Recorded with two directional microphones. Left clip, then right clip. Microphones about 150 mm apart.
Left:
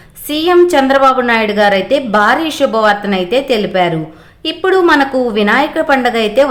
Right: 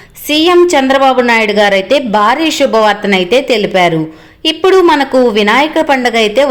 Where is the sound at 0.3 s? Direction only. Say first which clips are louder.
Right 2 dB; 10° right (ahead or behind).